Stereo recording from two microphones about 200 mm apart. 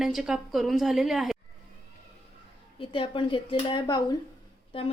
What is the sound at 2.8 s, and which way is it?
Speech, 25° left (ahead or behind).